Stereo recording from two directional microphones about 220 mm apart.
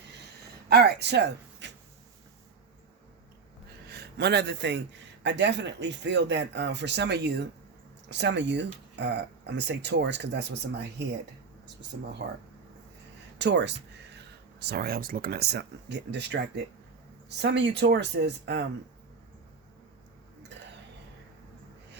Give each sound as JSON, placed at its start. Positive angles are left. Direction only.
{"t": 0.7, "sound": "speech", "side_deg": -45}
{"t": 3.8, "sound": "a man's voice", "side_deg": -45}
{"t": 13.4, "sound": "a man's voice", "side_deg": -50}